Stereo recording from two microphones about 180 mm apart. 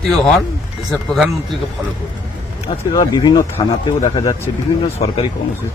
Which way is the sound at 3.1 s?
20° left (ahead or behind).